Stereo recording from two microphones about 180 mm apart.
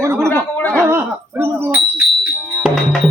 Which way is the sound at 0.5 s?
10° left (ahead or behind).